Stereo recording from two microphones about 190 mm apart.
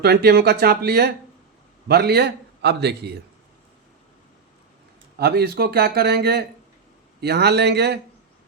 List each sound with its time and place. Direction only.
0.0 s a man's voice: 60° right (ahead or behind)
5.1 s a man's voice: 55° right (ahead or behind)